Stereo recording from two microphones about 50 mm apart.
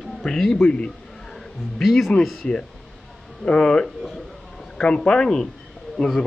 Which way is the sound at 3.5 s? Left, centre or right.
Centre.